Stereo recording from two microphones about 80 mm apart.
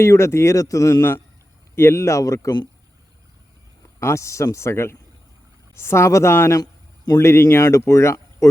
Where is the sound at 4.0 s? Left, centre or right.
Left.